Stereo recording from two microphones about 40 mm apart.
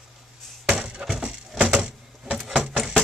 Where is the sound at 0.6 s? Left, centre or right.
Right.